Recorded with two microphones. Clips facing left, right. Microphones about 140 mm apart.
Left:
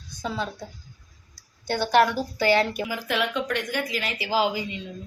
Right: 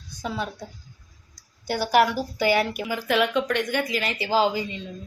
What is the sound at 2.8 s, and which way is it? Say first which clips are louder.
Speech: right 4 dB; centre (ahead or behind).